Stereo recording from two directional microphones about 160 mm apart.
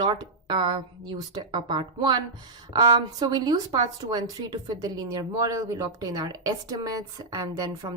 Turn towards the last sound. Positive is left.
turn(degrees=-20)  # may be behind; listen again after turning